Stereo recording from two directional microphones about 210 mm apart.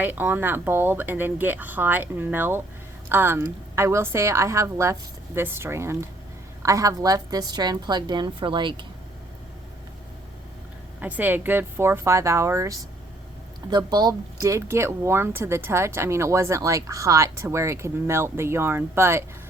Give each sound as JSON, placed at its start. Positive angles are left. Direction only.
{"t": 0.0, "sound": "a woman's voice", "side_deg": -10}
{"t": 11.0, "sound": "speech", "side_deg": -10}